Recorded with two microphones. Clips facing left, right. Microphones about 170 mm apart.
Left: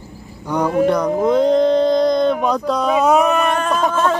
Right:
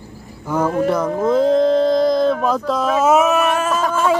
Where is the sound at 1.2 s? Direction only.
5° right (ahead or behind).